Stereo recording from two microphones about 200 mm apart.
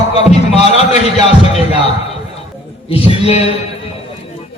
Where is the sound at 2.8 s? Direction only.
30° left (ahead or behind).